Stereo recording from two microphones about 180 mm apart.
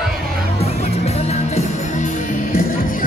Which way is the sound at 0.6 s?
35° left (ahead or behind).